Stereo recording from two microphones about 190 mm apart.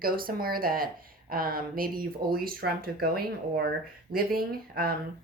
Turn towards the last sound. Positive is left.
turn(degrees=-50)  # may be behind; listen again after turning